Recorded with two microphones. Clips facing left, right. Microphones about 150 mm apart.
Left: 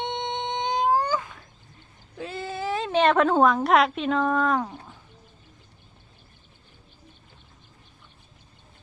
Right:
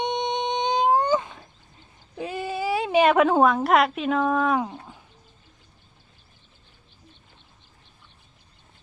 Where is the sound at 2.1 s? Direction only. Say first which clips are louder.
Right 3 dB; 15° right (ahead or behind).